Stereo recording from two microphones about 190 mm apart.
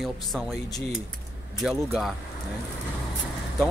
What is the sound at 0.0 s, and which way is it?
Speech, centre (ahead or behind).